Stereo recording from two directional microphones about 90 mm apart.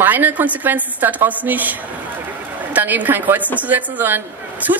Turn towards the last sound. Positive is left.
turn(degrees=-40)  # may be behind; listen again after turning